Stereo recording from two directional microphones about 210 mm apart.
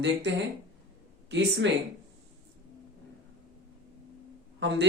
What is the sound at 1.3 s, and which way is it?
Speech, 55° right (ahead or behind).